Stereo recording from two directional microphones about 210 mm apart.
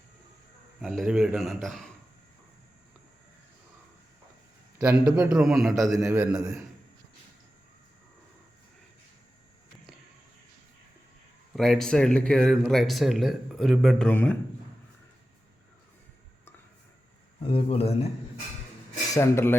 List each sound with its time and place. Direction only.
0.8 s speech: centre (ahead or behind)
5.0 s speech: 5° right (ahead or behind)
11.5 s speech: centre (ahead or behind)
17.4 s speech: 25° left (ahead or behind)
19.1 s speech: 15° left (ahead or behind)